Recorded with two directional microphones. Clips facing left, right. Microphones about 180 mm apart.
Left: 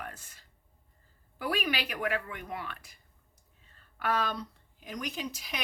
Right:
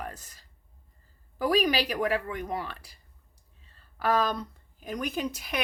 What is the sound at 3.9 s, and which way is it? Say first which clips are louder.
A woman's voice: right 5 dB; 40° right (ahead or behind).